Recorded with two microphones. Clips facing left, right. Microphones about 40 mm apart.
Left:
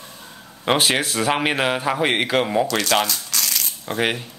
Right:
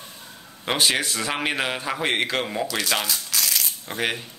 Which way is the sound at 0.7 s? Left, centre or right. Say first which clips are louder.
Left 3 dB; centre.